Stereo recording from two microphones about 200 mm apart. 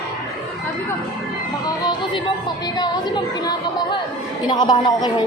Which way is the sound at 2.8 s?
20° left (ahead or behind).